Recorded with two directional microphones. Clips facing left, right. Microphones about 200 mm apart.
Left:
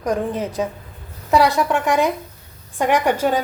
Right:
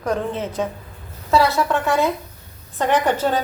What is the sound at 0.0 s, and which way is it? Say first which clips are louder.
A woman's voice: left 1 dB; 15° left (ahead or behind).